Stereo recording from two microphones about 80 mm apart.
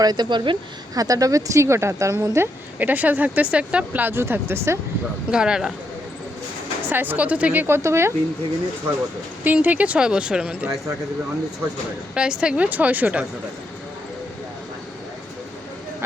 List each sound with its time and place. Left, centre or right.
0.0 s speech: right
0.9 s speech: right
2.7 s speech: right
5.3 s speech: centre
6.9 s speech: right
7.8 s speech: right
9.4 s speech: right
12.1 s speech: centre